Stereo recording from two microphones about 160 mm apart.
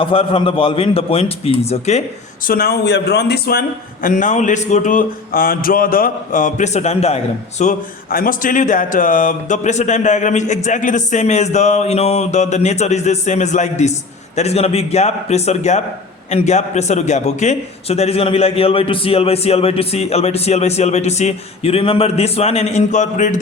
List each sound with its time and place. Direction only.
0.0 s a man's voice: 35° left (ahead or behind)
2.5 s speech: 75° left (ahead or behind)
4.0 s a man's voice: 55° left (ahead or behind)
7.6 s a man's voice: 55° left (ahead or behind)